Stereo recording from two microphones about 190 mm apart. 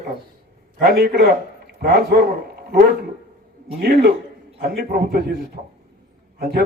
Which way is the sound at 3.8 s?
60° right (ahead or behind).